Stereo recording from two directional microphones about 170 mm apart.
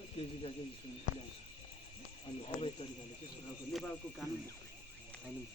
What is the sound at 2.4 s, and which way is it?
Speech, 35° left (ahead or behind).